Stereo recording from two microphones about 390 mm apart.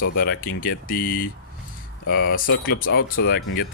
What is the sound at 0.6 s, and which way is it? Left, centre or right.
Speech, left.